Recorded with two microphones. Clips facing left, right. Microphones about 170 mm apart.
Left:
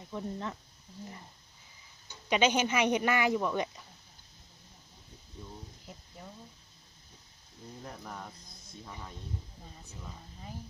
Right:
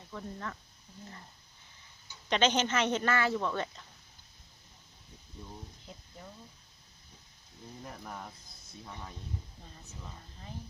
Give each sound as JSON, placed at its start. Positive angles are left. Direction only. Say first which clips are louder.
{"t": 0.1, "sound": "speech", "louder": "left 4 dB", "side_deg": 20}
{"t": 2.3, "sound": "speech", "louder": "left 1 dB", "side_deg": 10}
{"t": 5.9, "sound": "speech", "louder": "left 1 dB", "side_deg": 5}
{"t": 7.9, "sound": "speech", "louder": "even", "side_deg": -5}
{"t": 8.9, "sound": "speech", "louder": "even", "side_deg": 5}